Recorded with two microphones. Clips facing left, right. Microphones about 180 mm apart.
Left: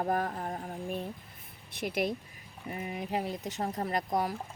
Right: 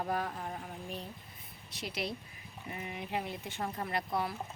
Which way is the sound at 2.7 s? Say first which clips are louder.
Left 4 dB; 35° left (ahead or behind).